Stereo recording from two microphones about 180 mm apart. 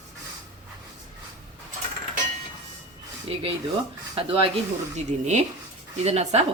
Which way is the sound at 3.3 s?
30° right (ahead or behind).